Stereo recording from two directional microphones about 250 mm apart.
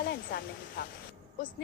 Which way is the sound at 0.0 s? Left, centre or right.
Left.